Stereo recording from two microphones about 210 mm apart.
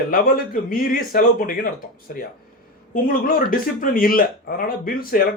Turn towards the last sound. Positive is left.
turn(degrees=45)  # may be behind; listen again after turning